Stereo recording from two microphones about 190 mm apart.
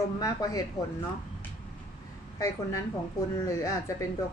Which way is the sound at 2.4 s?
15° left (ahead or behind).